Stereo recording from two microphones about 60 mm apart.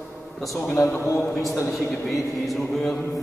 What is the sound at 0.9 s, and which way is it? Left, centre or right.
Speech, left.